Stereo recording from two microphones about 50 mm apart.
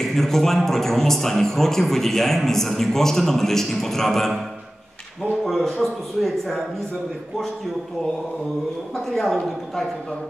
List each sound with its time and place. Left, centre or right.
0.1 s speech: centre
5.4 s speech: centre
8.9 s speech: centre